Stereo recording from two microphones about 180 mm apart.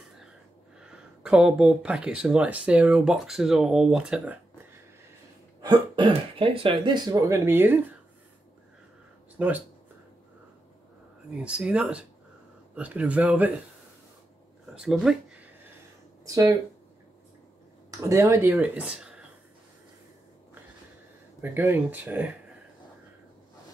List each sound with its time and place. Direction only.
0.7 s speech: 5° right (ahead or behind)
5.6 s speech: 25° right (ahead or behind)
9.4 s speech: 10° right (ahead or behind)
11.2 s speech: 5° right (ahead or behind)
14.7 s speech: 5° right (ahead or behind)
16.3 s speech: 20° right (ahead or behind)
18.0 s speech: 15° right (ahead or behind)
21.4 s speech: 10° right (ahead or behind)